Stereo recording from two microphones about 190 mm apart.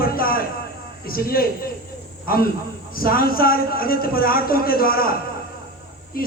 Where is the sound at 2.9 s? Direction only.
50° left (ahead or behind).